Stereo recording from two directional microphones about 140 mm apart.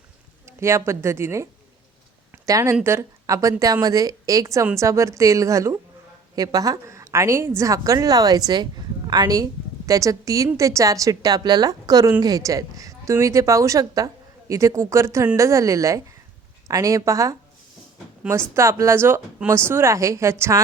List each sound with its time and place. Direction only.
0.4 s a woman's voice: 20° right (ahead or behind)
2.3 s a sound: 20° right (ahead or behind)
2.8 s a woman's voice: 20° right (ahead or behind)